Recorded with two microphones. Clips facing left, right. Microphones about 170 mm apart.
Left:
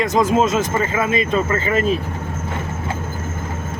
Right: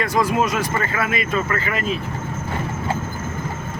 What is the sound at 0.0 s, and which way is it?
Speech, 20° left (ahead or behind).